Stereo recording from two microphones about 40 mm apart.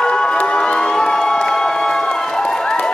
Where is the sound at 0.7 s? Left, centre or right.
Centre.